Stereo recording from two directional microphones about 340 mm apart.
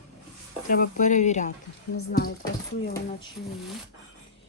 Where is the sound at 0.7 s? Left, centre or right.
Left.